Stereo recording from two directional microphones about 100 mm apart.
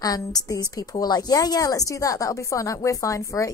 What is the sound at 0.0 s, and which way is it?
A woman's voice, 40° left (ahead or behind).